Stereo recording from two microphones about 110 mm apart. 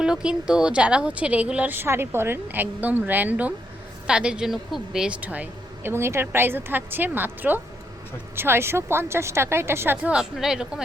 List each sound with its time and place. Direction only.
0.0 s a woman's voice: 5° right (ahead or behind)